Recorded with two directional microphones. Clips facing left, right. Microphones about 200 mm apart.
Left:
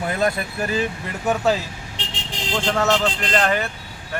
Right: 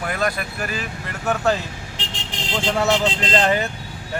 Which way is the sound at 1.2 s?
10° left (ahead or behind).